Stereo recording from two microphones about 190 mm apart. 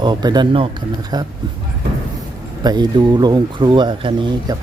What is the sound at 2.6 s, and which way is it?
Speech, 20° right (ahead or behind).